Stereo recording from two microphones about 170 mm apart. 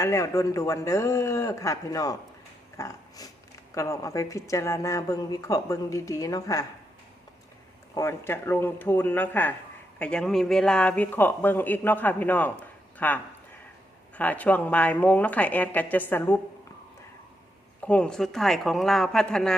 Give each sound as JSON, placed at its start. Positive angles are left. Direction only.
{"t": 0.0, "sound": "a man's voice", "side_deg": 15}
{"t": 2.7, "sound": "a sound", "side_deg": 20}
{"t": 3.8, "sound": "speech", "side_deg": 15}
{"t": 7.9, "sound": "a man's voice", "side_deg": 15}
{"t": 14.2, "sound": "a man's voice", "side_deg": 10}
{"t": 17.8, "sound": "speech", "side_deg": 5}